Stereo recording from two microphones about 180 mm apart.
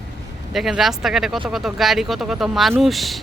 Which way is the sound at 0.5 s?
Centre (ahead or behind).